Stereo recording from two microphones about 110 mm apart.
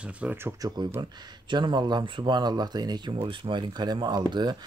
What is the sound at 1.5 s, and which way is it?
Speech, 45° right (ahead or behind).